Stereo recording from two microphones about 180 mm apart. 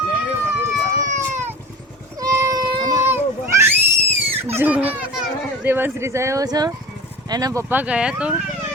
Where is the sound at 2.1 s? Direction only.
20° right (ahead or behind).